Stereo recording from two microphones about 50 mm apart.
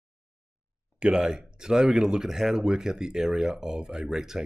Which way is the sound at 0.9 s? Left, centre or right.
Centre.